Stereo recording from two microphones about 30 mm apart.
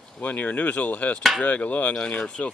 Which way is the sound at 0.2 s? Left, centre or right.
Left.